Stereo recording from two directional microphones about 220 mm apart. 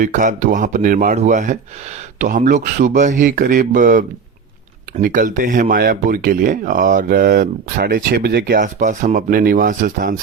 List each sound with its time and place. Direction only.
0.0 s speech: 35° right (ahead or behind)